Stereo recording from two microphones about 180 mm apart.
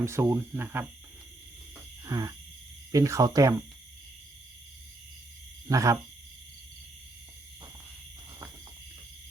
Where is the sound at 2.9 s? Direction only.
20° right (ahead or behind).